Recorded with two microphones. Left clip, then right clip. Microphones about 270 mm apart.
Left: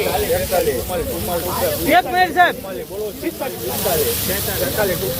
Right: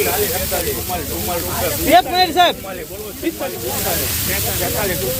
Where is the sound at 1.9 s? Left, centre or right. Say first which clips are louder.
Right 3 dB; centre.